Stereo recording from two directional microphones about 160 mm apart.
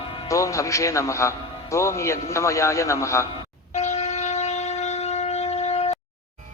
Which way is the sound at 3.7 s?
45° left (ahead or behind).